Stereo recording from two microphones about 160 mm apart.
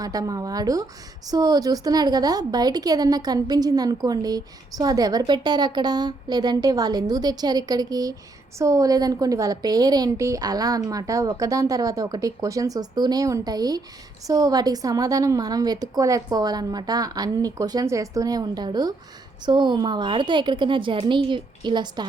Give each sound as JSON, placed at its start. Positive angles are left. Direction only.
{"t": 0.0, "sound": "a woman's voice", "side_deg": -20}